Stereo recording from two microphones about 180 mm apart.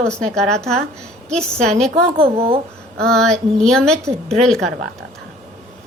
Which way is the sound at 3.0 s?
5° left (ahead or behind).